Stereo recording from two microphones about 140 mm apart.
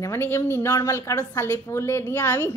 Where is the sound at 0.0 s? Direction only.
15° left (ahead or behind).